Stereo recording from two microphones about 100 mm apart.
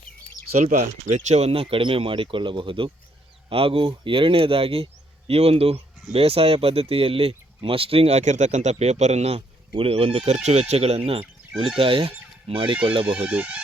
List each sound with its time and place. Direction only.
1.0 s speech: 80° right
5.3 s speech: 85° right
11.8 s speech: 65° right (ahead or behind)
13.1 s speech: 15° right (ahead or behind)